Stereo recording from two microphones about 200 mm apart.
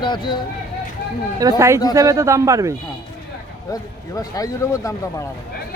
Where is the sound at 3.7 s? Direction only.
20° left (ahead or behind).